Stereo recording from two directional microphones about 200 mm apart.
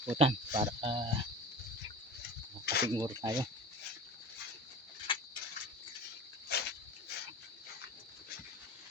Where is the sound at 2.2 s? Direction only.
55° left (ahead or behind).